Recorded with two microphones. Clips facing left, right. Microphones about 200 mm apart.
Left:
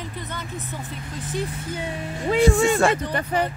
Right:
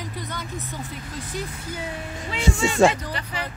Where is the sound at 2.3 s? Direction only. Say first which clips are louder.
Left 7 dB; 50° left (ahead or behind).